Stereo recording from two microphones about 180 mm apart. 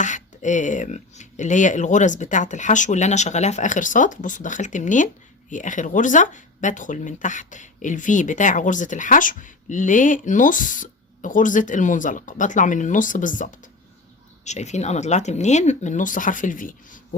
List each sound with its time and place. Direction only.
0.0 s speech: 45° left (ahead or behind)